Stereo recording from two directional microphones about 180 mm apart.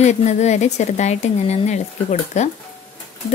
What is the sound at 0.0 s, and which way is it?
A woman's voice, 40° left (ahead or behind).